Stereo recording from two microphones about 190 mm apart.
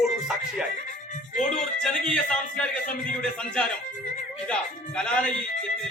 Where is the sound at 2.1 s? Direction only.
5° left (ahead or behind).